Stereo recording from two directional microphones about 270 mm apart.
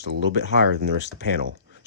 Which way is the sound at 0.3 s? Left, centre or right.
Left.